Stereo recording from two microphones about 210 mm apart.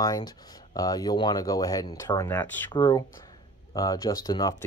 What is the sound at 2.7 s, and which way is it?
Speech, 20° left (ahead or behind).